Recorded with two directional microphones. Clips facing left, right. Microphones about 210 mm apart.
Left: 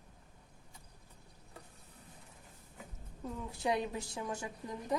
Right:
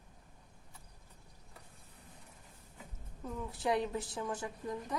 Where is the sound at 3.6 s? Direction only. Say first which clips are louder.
Right 1 dB; 10° left (ahead or behind).